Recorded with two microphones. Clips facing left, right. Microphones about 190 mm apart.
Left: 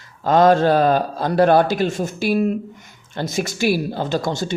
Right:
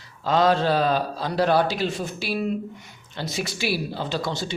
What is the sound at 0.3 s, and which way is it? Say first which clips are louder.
Speech: left 6 dB; 50° left (ahead or behind).